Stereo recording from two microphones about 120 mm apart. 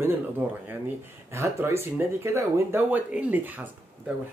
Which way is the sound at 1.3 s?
20° right (ahead or behind).